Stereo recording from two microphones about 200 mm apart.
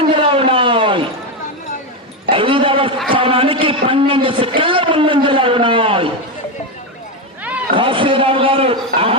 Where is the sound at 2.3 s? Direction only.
25° right (ahead or behind).